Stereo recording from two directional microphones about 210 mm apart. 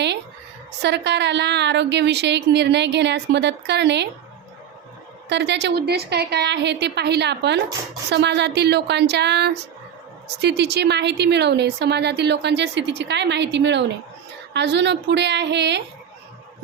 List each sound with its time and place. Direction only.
0.8 s speech: 55° right (ahead or behind)
5.3 s a woman's voice: 55° right (ahead or behind)